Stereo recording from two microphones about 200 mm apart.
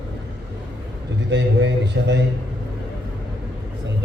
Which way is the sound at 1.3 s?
60° right (ahead or behind).